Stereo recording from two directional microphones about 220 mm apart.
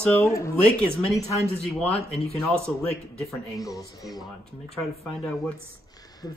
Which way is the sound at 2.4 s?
Centre (ahead or behind).